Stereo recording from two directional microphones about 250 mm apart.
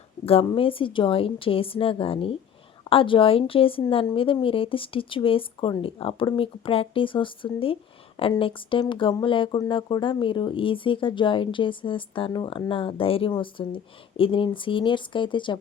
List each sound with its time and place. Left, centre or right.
0.3 s speech: left